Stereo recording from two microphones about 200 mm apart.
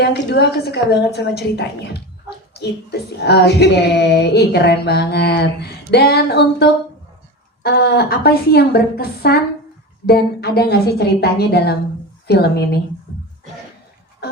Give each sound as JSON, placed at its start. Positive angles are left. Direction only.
{"t": 0.0, "sound": "speech", "side_deg": 55}
{"t": 2.5, "sound": "a sound", "side_deg": 55}
{"t": 3.2, "sound": "a woman's voice", "side_deg": 55}